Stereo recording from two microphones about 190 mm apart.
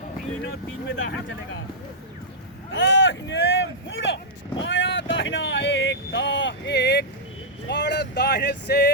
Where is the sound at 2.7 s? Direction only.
70° left (ahead or behind).